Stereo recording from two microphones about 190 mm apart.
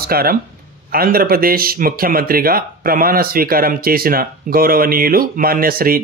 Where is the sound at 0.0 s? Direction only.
50° right (ahead or behind).